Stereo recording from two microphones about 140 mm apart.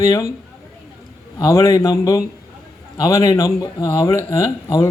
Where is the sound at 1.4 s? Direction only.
20° left (ahead or behind).